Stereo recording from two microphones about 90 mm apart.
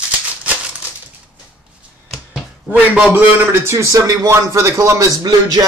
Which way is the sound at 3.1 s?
25° right (ahead or behind).